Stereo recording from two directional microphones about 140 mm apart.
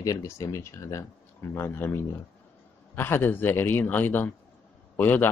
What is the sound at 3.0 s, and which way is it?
A man's voice, 15° left (ahead or behind).